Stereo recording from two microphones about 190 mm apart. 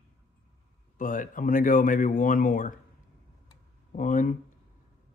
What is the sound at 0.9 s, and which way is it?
Speech, 45° left (ahead or behind).